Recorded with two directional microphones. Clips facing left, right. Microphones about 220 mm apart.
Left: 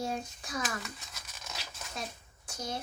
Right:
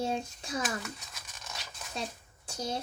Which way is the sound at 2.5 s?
30° right (ahead or behind).